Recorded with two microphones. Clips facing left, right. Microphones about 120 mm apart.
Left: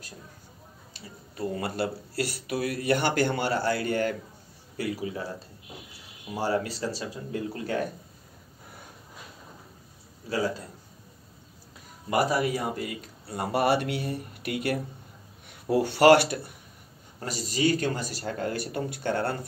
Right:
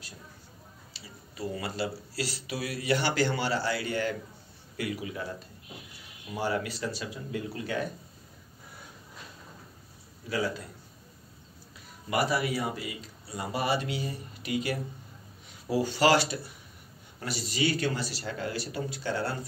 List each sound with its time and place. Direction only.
0.9 s speech: 50° left (ahead or behind)
4.7 s speech: 35° left (ahead or behind)
6.3 s speech: 35° left (ahead or behind)
12.1 s a man's voice: 40° left (ahead or behind); by 16.5 s 60° left (ahead or behind)
17.2 s speech: 40° left (ahead or behind)